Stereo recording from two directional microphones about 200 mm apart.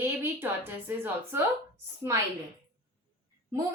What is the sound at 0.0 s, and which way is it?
A woman's voice, 10° right (ahead or behind).